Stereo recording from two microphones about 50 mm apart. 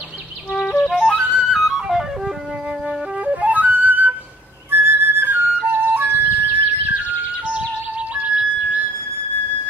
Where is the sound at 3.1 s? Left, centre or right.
Right.